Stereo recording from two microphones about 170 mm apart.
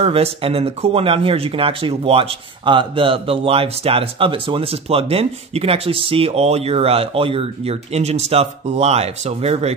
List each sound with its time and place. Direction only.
0.0 s speech: 35° right (ahead or behind)